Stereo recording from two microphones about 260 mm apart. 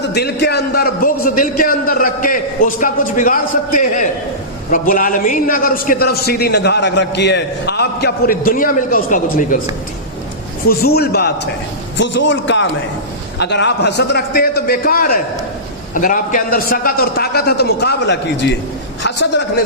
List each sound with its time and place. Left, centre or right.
0.1 s a man's voice: left
10.7 s a man's voice: left